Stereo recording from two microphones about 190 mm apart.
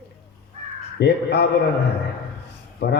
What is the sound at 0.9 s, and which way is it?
Speech, 60° left (ahead or behind).